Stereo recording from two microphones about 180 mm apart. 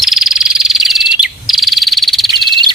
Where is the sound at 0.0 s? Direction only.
Centre (ahead or behind).